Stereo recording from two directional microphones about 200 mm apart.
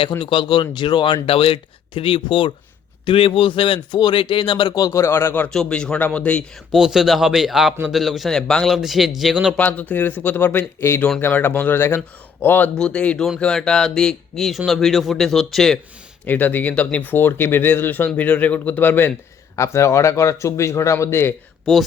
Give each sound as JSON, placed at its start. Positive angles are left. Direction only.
{"t": 0.2, "sound": "speech", "side_deg": 25}
{"t": 9.6, "sound": "speech", "side_deg": 10}